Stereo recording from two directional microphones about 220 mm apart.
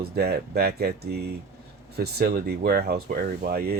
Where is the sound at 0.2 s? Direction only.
45° right (ahead or behind).